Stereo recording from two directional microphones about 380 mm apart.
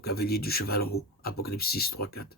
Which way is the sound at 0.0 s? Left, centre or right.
Left.